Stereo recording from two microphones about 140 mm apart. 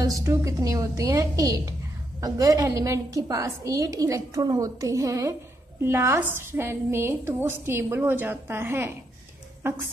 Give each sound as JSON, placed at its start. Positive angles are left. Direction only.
{"t": 0.0, "sound": "a woman's voice", "side_deg": -20}